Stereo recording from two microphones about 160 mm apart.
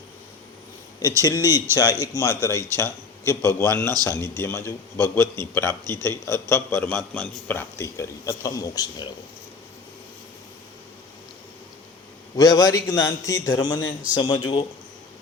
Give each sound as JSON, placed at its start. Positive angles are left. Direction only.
{"t": 1.4, "sound": "speech", "side_deg": -20}
{"t": 1.7, "sound": "a man's voice", "side_deg": 20}
{"t": 6.8, "sound": "a man's voice", "side_deg": 5}
{"t": 12.4, "sound": "a man's voice", "side_deg": 25}